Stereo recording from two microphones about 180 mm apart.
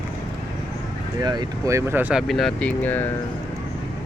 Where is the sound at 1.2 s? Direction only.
25° right (ahead or behind); by 3.1 s 10° left (ahead or behind).